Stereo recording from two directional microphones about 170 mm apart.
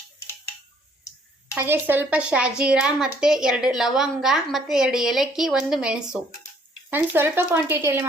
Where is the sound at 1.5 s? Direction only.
10° right (ahead or behind).